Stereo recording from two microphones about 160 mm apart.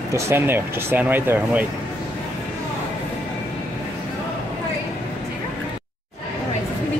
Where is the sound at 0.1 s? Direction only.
15° right (ahead or behind).